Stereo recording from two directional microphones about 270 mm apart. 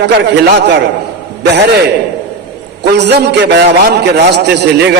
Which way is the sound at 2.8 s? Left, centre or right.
Right.